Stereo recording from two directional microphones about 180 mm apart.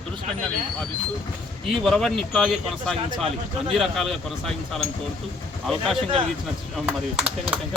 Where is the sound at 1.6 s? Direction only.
Centre (ahead or behind).